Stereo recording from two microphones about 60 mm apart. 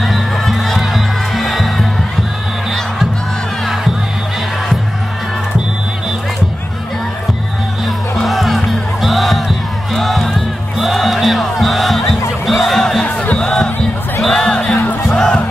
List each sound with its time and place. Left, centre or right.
0.0 s music: centre
8.2 s music: centre
13.0 s music: left
13.4 s music: centre